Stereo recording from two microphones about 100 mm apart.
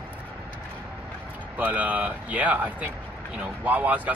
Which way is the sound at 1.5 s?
15° right (ahead or behind).